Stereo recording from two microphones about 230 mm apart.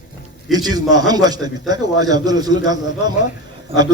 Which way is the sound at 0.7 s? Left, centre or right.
Centre.